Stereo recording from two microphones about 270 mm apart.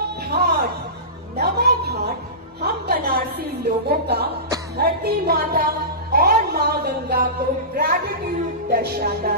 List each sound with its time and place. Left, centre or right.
0.3 s a sound: right
1.3 s music: right
2.6 s a woman's voice: right